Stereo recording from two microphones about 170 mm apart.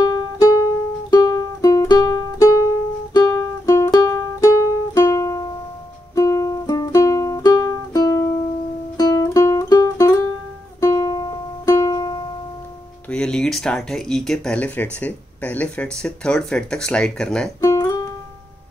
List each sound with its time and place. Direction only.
0.4 s music: 20° left (ahead or behind)
13.1 s speech: 5° left (ahead or behind)
17.6 s music: 15° left (ahead or behind)